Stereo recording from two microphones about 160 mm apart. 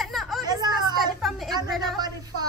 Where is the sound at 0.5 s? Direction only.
25° right (ahead or behind).